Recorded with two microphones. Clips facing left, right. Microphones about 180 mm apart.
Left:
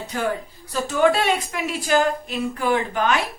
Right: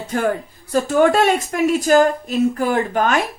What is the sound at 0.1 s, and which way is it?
A woman's voice, 50° right (ahead or behind).